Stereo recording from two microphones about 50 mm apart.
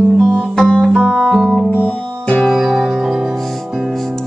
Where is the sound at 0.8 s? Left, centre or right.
Centre.